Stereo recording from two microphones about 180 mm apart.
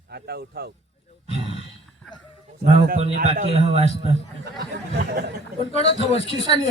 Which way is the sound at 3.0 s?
40° right (ahead or behind).